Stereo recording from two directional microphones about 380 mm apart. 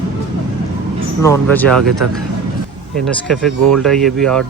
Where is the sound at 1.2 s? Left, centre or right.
Centre.